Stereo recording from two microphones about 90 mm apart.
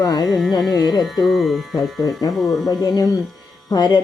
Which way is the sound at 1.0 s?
Centre (ahead or behind).